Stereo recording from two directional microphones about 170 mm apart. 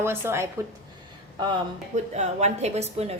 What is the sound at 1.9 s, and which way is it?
A woman's voice, 40° right (ahead or behind).